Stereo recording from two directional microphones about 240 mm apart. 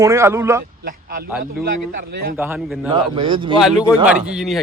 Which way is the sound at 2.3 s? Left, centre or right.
Centre.